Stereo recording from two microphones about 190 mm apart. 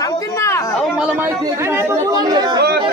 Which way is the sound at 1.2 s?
10° right (ahead or behind).